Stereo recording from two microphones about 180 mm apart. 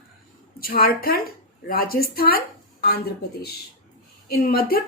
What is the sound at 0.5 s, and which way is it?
A woman's voice, 55° left (ahead or behind).